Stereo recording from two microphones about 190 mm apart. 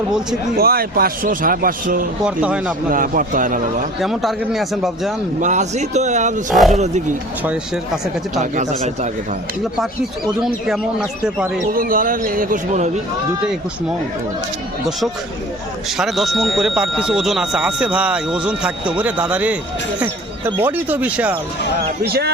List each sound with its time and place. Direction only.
0.5 s a man's voice: 50° right (ahead or behind)
2.2 s speech: 5° right (ahead or behind)
2.9 s a man's voice: 45° right (ahead or behind)
4.0 s speech: centre (ahead or behind)
5.4 s a man's voice: 40° right (ahead or behind)
6.5 s speech: centre (ahead or behind)
6.7 s a man's voice: 35° right (ahead or behind)
8.4 s a man's voice: 40° right (ahead or behind)
11.7 s a man's voice: 50° right (ahead or behind)
16.0 s speech: centre (ahead or behind)
22.0 s speech: 55° right (ahead or behind)